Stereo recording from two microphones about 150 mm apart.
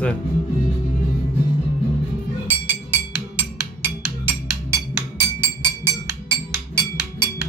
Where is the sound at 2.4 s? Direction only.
10° right (ahead or behind).